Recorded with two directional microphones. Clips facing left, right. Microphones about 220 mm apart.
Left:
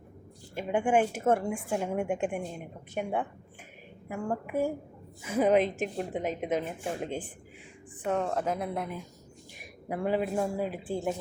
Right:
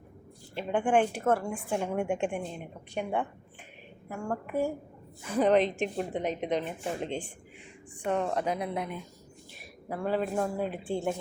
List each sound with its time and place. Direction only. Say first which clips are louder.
0.5 s a woman's voice: even; 10° left (ahead or behind)
4.1 s a woman's voice: left 1 dB; 15° left (ahead or behind)
9.6 s speech: left 2 dB; 15° left (ahead or behind)